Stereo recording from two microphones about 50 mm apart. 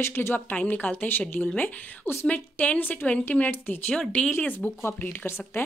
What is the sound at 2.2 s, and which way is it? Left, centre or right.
A woman's voice, left.